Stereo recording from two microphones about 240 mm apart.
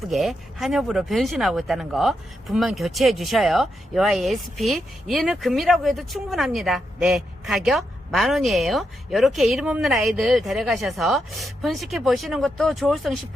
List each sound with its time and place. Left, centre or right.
0.1 s speech: centre